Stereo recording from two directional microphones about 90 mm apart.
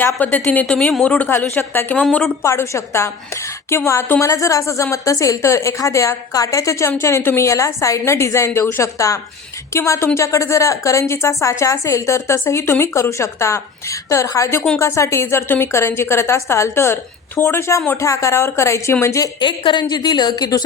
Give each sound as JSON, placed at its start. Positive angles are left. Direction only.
{"t": 0.2, "sound": "a woman's voice", "side_deg": 20}
{"t": 2.4, "sound": "a woman's voice", "side_deg": 30}
{"t": 19.4, "sound": "a woman's voice", "side_deg": 60}